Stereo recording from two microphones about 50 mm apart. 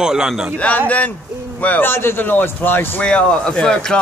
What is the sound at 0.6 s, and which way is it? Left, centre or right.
Speech, left.